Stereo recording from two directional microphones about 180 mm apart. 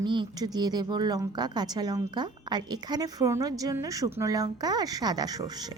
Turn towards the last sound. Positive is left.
turn(degrees=-20)  # may be behind; listen again after turning